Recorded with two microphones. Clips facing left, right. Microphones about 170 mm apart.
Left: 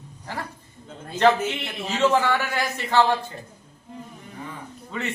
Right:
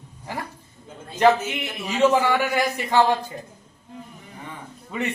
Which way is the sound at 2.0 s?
15° right (ahead or behind).